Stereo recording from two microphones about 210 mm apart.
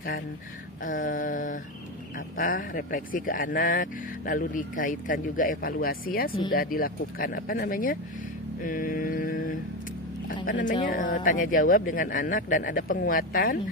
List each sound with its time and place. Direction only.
0.8 s speech: 40° left (ahead or behind)
10.9 s speech: 40° left (ahead or behind)